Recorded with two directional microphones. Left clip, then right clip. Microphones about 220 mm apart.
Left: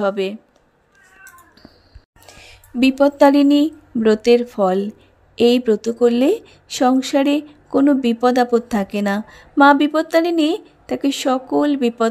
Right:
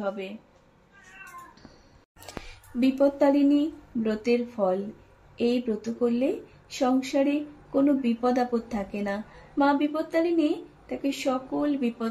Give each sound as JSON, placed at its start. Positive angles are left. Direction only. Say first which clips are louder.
{"t": 0.0, "sound": "speech", "louder": "left 12 dB", "side_deg": 50}
{"t": 2.3, "sound": "a sound", "louder": "right 2 dB", "side_deg": 0}
{"t": 2.8, "sound": "a woman's voice", "louder": "left 10 dB", "side_deg": 40}